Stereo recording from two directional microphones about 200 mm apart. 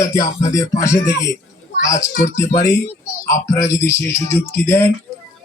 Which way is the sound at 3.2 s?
15° left (ahead or behind).